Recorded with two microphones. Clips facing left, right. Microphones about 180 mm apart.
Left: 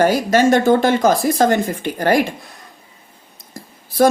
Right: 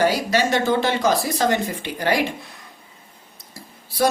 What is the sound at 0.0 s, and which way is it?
Speech, 50° left (ahead or behind).